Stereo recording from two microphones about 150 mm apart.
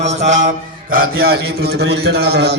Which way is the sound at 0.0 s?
50° right (ahead or behind).